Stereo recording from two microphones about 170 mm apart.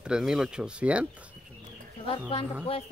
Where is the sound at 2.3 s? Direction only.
35° left (ahead or behind).